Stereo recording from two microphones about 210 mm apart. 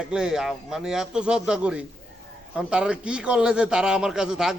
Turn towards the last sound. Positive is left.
turn(degrees=-5)  # may be behind; listen again after turning